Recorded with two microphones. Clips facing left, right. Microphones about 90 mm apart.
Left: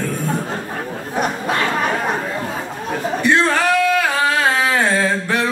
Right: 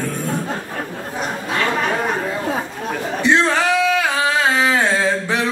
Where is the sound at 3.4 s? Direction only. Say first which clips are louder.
Left 1 dB; 15° right (ahead or behind).